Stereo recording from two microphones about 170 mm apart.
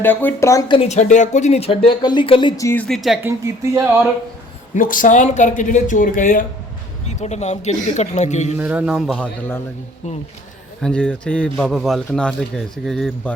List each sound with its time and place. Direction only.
0.0 s speech: 10° left (ahead or behind)
0.7 s speech: 40° left (ahead or behind); by 2.8 s 20° left (ahead or behind)
2.8 s a man's voice: centre (ahead or behind)
3.2 s speech: 15° right (ahead or behind)
4.7 s speech: 50° left (ahead or behind)
7.1 s speech: 40° left (ahead or behind)
8.5 s a man's voice: 10° right (ahead or behind)
10.8 s a man's voice: 5° left (ahead or behind)